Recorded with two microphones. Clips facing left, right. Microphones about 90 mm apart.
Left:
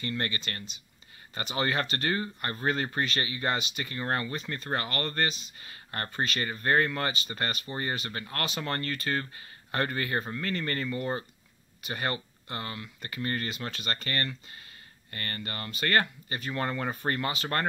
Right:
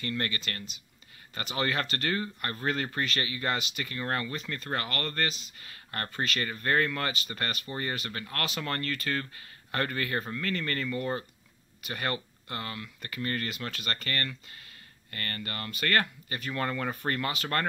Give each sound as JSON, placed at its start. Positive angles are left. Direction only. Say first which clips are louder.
{"t": 0.0, "sound": "speech", "louder": "even", "side_deg": 10}
{"t": 1.6, "sound": "speech", "louder": "left 1 dB", "side_deg": 15}